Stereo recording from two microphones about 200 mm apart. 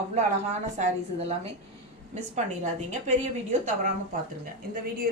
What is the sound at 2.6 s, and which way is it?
A woman's voice, 35° right (ahead or behind).